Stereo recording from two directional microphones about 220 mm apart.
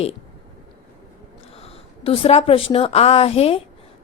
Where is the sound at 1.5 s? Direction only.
25° left (ahead or behind).